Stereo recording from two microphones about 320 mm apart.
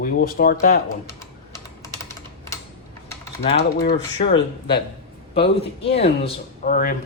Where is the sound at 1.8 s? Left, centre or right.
Centre.